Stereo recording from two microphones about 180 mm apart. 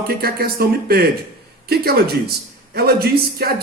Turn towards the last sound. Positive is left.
turn(degrees=-60)  # may be behind; listen again after turning